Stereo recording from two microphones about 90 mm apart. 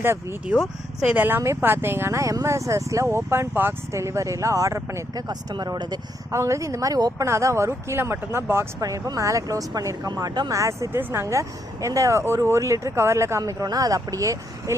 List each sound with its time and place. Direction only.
0.0 s speech: 25° right (ahead or behind)
0.4 s speech: 5° right (ahead or behind)
1.1 s speech: 20° right (ahead or behind)
5.1 s speech: 50° right (ahead or behind)
6.3 s speech: 35° right (ahead or behind)
8.8 s speech: 40° right (ahead or behind)
10.5 s speech: 35° right (ahead or behind)
13.4 s speech: 40° right (ahead or behind)